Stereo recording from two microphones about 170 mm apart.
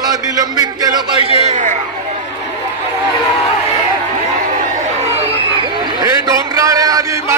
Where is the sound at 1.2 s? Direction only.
40° right (ahead or behind).